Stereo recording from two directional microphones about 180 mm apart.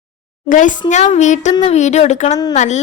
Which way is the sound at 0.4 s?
45° left (ahead or behind).